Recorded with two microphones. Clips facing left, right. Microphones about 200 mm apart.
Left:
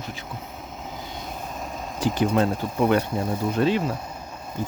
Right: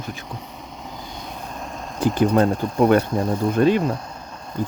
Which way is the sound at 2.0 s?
55° right (ahead or behind).